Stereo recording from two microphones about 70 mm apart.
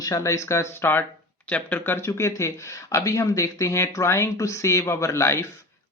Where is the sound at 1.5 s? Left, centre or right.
Left.